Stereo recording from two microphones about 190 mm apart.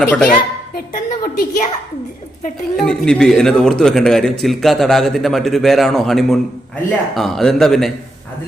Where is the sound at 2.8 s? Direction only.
5° left (ahead or behind).